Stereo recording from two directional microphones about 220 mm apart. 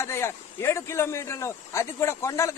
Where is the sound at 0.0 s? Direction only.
10° left (ahead or behind).